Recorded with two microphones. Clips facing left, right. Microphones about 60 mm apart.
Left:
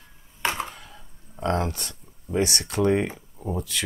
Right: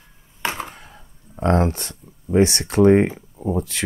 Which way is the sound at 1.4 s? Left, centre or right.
Right.